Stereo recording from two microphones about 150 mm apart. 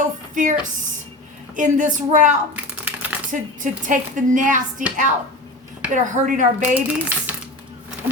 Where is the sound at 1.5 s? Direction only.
60° right (ahead or behind).